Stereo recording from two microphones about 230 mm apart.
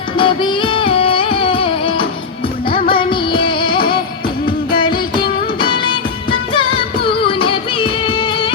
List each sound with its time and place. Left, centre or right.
0.2 s music: left